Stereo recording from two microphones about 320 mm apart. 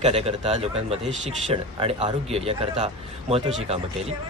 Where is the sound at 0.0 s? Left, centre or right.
Centre.